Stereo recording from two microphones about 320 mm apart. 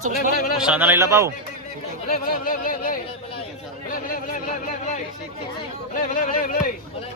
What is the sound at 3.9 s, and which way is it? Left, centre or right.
Chatter, left.